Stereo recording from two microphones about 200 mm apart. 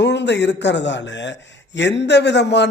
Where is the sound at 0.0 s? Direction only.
60° left (ahead or behind).